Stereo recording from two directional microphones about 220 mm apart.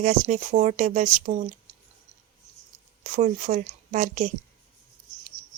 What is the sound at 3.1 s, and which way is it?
A woman's voice, 35° right (ahead or behind).